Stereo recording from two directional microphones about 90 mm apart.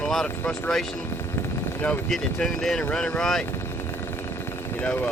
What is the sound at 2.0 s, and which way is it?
Speech, 5° left (ahead or behind).